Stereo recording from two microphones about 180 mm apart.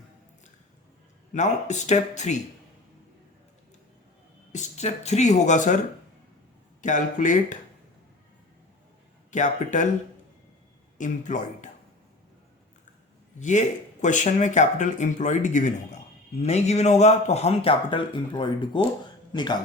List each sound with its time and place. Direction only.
1.3 s a man's voice: 40° left (ahead or behind)
4.5 s a man's voice: 40° left (ahead or behind)
6.8 s speech: 45° left (ahead or behind)
9.3 s speech: 45° left (ahead or behind)
10.9 s speech: 45° left (ahead or behind)
13.4 s a man's voice: 40° left (ahead or behind); by 19.5 s 25° left (ahead or behind)